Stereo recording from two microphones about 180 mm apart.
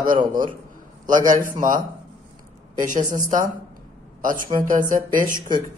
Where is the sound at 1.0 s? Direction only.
45° right (ahead or behind).